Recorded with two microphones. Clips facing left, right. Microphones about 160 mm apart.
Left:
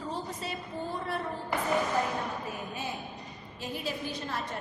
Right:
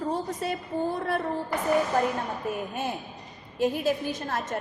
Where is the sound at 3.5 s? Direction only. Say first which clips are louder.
Right 11 dB; 50° right (ahead or behind).